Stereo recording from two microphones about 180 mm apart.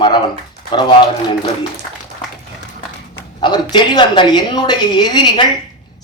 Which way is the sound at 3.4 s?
25° left (ahead or behind).